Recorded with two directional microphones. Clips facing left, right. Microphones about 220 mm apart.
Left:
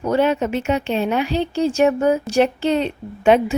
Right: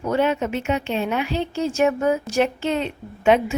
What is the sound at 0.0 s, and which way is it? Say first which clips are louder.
A woman's voice: left 3 dB; 35° left (ahead or behind).